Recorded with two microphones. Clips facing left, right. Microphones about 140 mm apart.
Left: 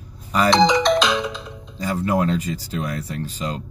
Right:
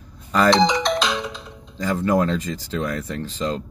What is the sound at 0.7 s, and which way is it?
Music, 90° left.